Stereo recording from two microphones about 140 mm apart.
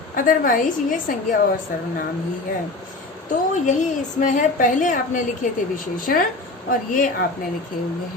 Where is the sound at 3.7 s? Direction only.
60° left (ahead or behind).